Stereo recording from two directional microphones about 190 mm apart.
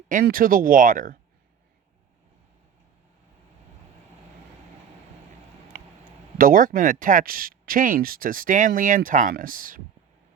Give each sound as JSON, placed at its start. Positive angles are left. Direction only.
{"t": 0.1, "sound": "speech", "side_deg": -45}
{"t": 6.3, "sound": "speech", "side_deg": -45}